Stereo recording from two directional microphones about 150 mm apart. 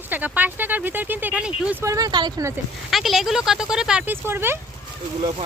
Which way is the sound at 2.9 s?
Centre (ahead or behind).